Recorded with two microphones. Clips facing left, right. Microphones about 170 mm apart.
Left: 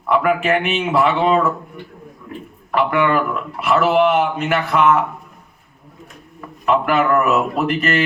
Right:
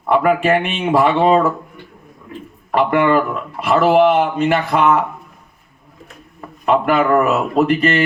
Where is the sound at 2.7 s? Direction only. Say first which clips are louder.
Right 3 dB; 30° right (ahead or behind).